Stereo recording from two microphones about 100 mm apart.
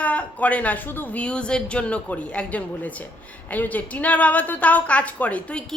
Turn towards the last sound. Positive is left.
turn(degrees=10)  # may be behind; listen again after turning